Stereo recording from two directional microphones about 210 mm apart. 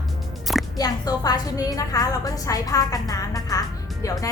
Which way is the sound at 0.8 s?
20° left (ahead or behind).